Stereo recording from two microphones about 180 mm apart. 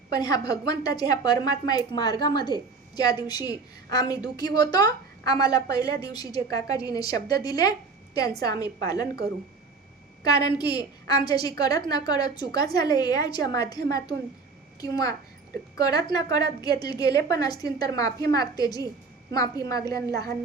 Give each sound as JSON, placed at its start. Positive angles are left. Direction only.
{"t": 0.1, "sound": "a woman's voice", "side_deg": 20}
{"t": 10.2, "sound": "a woman's voice", "side_deg": 20}